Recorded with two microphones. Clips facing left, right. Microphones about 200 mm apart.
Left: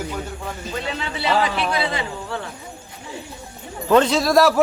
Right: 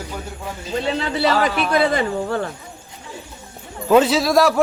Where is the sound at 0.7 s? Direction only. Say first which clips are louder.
Right 8 dB; 35° right (ahead or behind).